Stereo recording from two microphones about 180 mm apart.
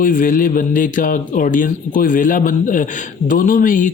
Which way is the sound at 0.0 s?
50° left (ahead or behind).